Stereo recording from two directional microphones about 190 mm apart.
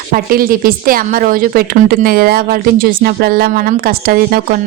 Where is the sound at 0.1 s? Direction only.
50° right (ahead or behind).